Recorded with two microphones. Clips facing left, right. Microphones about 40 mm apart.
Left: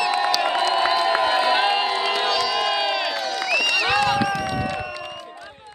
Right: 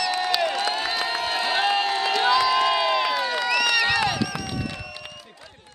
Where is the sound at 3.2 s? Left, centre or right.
Right.